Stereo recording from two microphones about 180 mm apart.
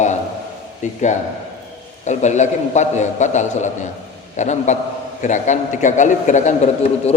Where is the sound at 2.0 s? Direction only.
40° left (ahead or behind).